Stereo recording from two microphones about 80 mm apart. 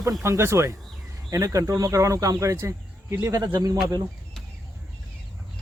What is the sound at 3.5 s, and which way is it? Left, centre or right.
Speech, right.